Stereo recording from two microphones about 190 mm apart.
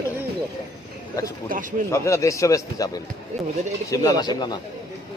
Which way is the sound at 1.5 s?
45° right (ahead or behind).